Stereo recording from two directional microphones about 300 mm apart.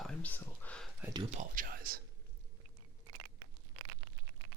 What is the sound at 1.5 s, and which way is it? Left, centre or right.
Speech, right.